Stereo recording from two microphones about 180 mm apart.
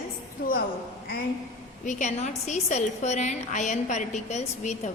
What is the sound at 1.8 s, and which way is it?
A woman's voice, 45° left (ahead or behind).